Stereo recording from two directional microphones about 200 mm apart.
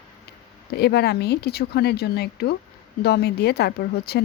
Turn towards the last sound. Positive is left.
turn(degrees=55)  # may be behind; listen again after turning